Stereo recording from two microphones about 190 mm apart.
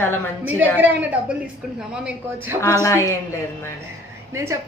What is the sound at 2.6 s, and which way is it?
Speech, 15° left (ahead or behind).